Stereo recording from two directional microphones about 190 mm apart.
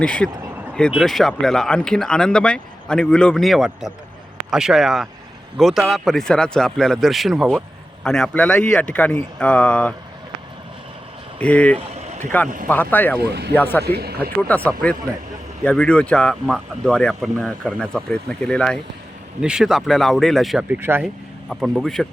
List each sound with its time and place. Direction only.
0.0 s speech: 5° left (ahead or behind)
11.3 s speech: 5° left (ahead or behind)
13.2 s speech: 60° right (ahead or behind)
13.5 s speech: 10° left (ahead or behind)
13.8 s speech: 55° right (ahead or behind)
14.4 s speech: 10° left (ahead or behind); by 21.1 s 10° right (ahead or behind)
21.5 s speech: centre (ahead or behind)